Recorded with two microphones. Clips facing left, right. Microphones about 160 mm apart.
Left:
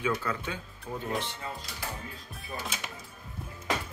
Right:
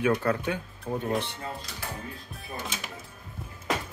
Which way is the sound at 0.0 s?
60° right (ahead or behind).